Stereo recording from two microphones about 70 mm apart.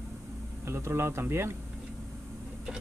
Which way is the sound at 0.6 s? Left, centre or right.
Right.